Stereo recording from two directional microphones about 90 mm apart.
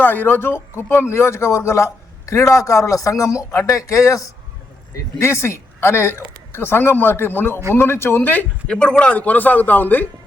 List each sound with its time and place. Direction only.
0.0 s speech: 20° left (ahead or behind); by 4.2 s 35° left (ahead or behind)
5.2 s speech: 30° left (ahead or behind)